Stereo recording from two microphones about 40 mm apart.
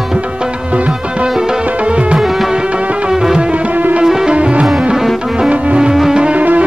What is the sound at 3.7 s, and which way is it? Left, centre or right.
Music, right.